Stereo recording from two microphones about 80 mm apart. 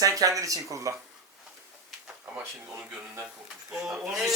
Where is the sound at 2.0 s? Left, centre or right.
Centre.